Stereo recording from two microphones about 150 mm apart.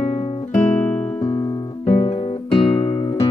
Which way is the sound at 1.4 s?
30° left (ahead or behind).